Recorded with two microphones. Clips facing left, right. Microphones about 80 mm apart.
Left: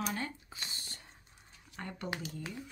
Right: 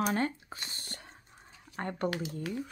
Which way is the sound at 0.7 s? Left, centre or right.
Right.